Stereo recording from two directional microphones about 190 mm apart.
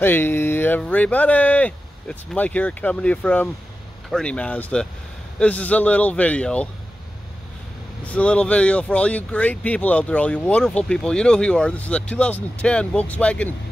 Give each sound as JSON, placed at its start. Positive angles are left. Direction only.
{"t": 0.0, "sound": "speech", "side_deg": 10}
{"t": 8.0, "sound": "speech", "side_deg": 5}